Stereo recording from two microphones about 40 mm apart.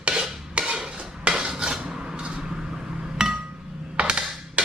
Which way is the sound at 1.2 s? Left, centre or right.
Right.